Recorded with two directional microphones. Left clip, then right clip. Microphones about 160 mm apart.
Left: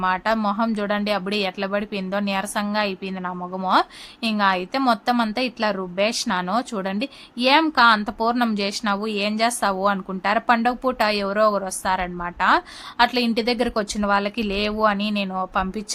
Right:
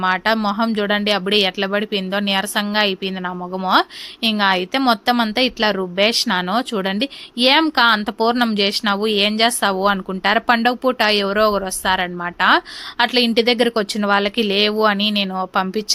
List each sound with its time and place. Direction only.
0.0 s speech: 15° right (ahead or behind)